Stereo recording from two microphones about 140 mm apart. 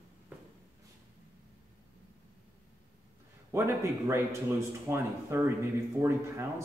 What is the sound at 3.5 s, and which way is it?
Speech, 20° right (ahead or behind).